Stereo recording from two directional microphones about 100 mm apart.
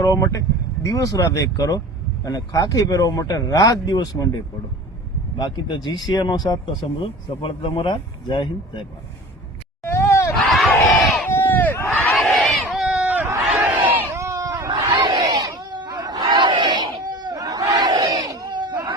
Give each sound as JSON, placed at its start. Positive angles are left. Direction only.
{"t": 0.0, "sound": "speech", "side_deg": 35}
{"t": 5.4, "sound": "speech", "side_deg": 45}
{"t": 7.0, "sound": "speech", "side_deg": 60}
{"t": 9.8, "sound": "a sound", "side_deg": 25}
{"t": 10.3, "sound": "crowd", "side_deg": 0}
{"t": 11.3, "sound": "crowd", "side_deg": 20}
{"t": 12.1, "sound": "crowd", "side_deg": 0}
{"t": 14.1, "sound": "a sound", "side_deg": -30}
{"t": 14.7, "sound": "crowd", "side_deg": -50}
{"t": 16.2, "sound": "battle cry", "side_deg": -55}